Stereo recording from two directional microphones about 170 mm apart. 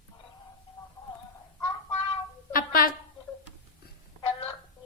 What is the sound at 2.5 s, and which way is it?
Music, 55° left (ahead or behind).